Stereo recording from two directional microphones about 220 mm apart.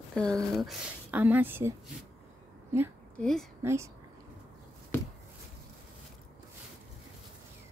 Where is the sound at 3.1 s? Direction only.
5° left (ahead or behind).